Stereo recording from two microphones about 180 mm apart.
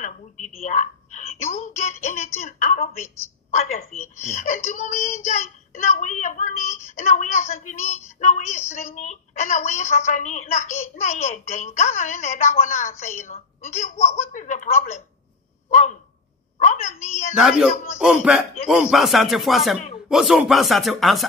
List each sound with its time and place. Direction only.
0.0 s a woman's voice: 40° left (ahead or behind)
4.3 s a woman's voice: 40° left (ahead or behind)
16.5 s a sound: 40° left (ahead or behind)
17.4 s a man's voice: 5° right (ahead or behind)